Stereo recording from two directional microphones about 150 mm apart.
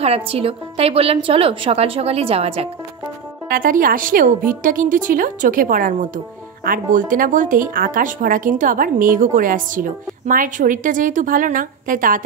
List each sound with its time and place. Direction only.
0.0 s a woman's voice: 40° right (ahead or behind)
3.4 s a woman's voice: 70° right (ahead or behind)